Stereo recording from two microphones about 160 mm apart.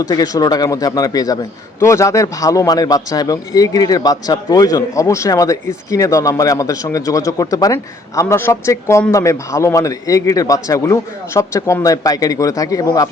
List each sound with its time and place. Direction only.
0.0 s a man's voice: 25° left (ahead or behind)